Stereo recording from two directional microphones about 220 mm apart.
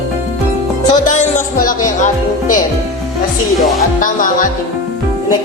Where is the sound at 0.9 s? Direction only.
35° left (ahead or behind).